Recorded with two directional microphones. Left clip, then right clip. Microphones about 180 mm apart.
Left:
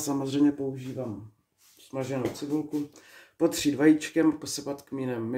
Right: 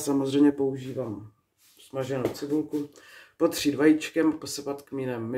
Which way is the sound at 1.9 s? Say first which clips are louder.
Right 2 dB; 5° right (ahead or behind).